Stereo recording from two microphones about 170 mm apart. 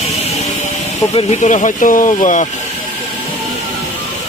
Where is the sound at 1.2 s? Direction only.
40° left (ahead or behind).